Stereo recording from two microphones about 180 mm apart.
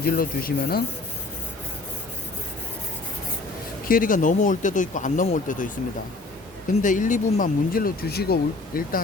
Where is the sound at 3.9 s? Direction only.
50° left (ahead or behind).